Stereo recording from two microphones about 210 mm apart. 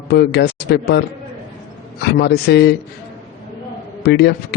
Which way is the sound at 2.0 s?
50° left (ahead or behind).